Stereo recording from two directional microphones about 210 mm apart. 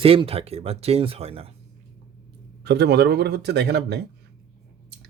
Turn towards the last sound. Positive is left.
turn(degrees=-50)  # may be behind; listen again after turning